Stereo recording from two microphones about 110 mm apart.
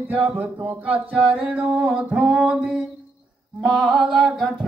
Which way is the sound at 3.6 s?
Centre (ahead or behind).